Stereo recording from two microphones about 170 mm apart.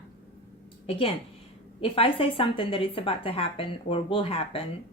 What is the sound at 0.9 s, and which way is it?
Speech, 35° left (ahead or behind).